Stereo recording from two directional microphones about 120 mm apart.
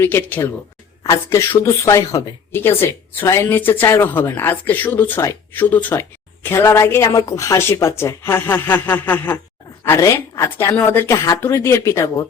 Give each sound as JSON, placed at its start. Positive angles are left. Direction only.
{"t": 0.0, "sound": "speech", "side_deg": 15}